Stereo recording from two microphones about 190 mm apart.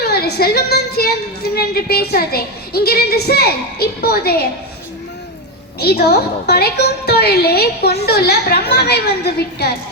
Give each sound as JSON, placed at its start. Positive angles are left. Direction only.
{"t": 0.0, "sound": "a woman's voice", "side_deg": 55}
{"t": 5.8, "sound": "a woman's voice", "side_deg": 60}